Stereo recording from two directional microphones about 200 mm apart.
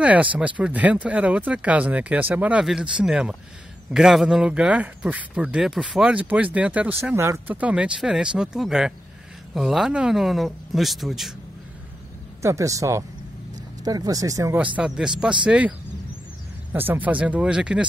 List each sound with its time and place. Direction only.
0.0 s speech: 5° right (ahead or behind)
12.4 s speech: 15° right (ahead or behind)
16.7 s speech: 10° right (ahead or behind)